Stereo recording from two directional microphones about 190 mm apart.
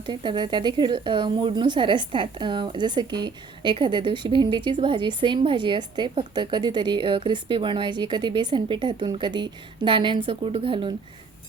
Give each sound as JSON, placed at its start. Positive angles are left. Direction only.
{"t": 0.0, "sound": "speech", "side_deg": -25}